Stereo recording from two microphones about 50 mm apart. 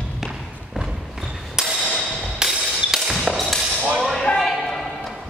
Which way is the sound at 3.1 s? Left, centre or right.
Centre.